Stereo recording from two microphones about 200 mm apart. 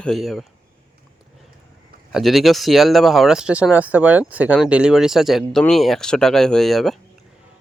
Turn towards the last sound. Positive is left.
turn(degrees=0)  # may be behind; listen again after turning